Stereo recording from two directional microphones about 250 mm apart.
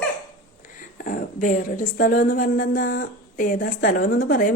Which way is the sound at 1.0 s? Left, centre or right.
Left.